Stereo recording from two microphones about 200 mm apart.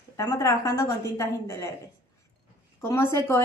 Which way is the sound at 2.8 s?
10° left (ahead or behind).